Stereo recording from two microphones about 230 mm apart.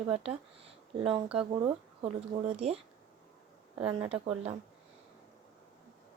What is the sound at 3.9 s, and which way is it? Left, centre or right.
Speech, right.